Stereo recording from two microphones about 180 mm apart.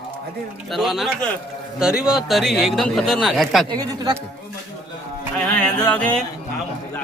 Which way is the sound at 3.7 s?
20° right (ahead or behind).